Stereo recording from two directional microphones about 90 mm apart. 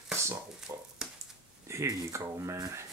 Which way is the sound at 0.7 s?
30° right (ahead or behind).